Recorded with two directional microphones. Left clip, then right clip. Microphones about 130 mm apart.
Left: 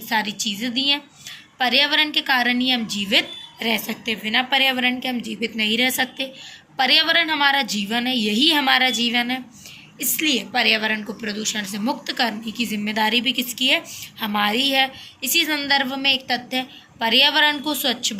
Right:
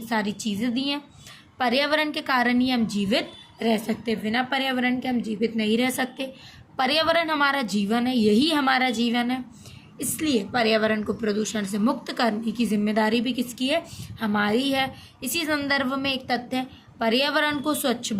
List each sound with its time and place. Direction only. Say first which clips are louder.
0.1 s a woman's voice: left 5 dB; 65° right (ahead or behind)